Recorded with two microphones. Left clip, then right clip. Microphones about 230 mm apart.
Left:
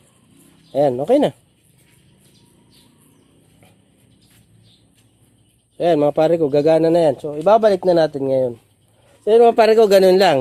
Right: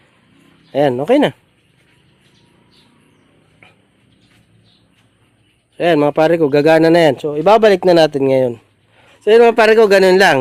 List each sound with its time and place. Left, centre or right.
0.7 s a man's voice: right
5.7 s a man's voice: right
9.2 s a man's voice: right